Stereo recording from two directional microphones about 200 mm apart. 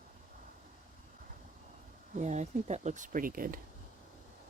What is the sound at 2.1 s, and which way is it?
Speech, 35° right (ahead or behind).